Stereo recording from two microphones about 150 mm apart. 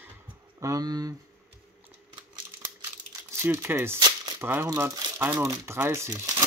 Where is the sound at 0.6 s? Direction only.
25° right (ahead or behind).